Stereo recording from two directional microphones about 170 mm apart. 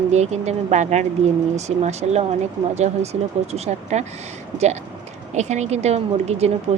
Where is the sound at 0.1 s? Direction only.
40° right (ahead or behind).